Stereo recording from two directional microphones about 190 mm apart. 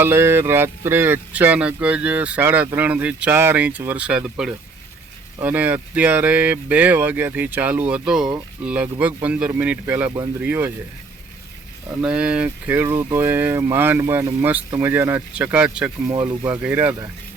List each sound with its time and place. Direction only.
0.0 s speech: 10° right (ahead or behind)
12.0 s speech: 5° right (ahead or behind)
16.0 s speech: 20° right (ahead or behind)
16.5 s speech: 10° right (ahead or behind)